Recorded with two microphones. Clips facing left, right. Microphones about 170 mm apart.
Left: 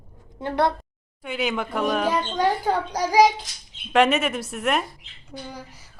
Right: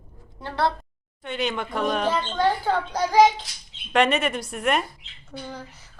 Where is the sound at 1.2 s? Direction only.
5° left (ahead or behind).